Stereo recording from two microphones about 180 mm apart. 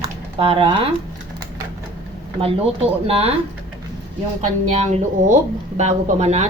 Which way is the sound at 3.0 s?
35° right (ahead or behind).